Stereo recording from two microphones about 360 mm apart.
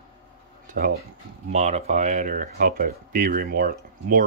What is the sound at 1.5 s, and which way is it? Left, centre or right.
Speech, centre.